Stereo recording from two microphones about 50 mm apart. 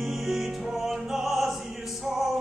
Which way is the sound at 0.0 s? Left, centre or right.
Centre.